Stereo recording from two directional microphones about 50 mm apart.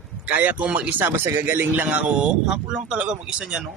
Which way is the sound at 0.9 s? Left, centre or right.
Right.